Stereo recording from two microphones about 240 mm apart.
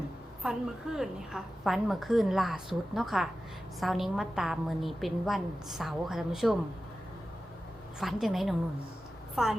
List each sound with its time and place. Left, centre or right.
0.4 s a woman's voice: centre
7.9 s a woman's voice: centre